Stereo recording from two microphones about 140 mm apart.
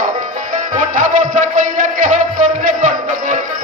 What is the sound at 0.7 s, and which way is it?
Music, 70° right (ahead or behind).